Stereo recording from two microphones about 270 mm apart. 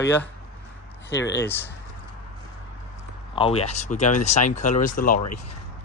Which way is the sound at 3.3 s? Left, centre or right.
Left.